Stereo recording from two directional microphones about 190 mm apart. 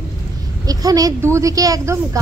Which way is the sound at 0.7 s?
20° right (ahead or behind).